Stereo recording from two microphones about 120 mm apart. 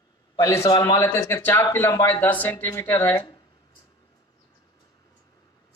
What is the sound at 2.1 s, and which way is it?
Speech, 15° left (ahead or behind).